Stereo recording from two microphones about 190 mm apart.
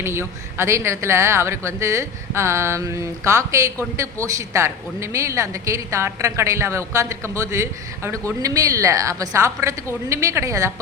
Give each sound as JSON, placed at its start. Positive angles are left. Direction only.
{"t": 0.0, "sound": "speech", "side_deg": -15}